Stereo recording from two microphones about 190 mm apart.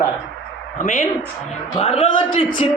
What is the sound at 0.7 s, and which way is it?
Speech, 40° left (ahead or behind).